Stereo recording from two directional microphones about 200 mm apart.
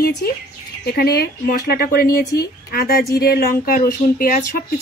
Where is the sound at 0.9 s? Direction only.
50° left (ahead or behind).